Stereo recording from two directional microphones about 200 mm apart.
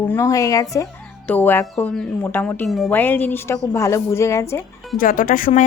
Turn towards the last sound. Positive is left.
turn(degrees=45)  # may be behind; listen again after turning